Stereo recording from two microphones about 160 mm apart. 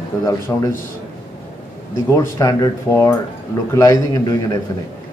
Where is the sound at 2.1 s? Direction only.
20° left (ahead or behind).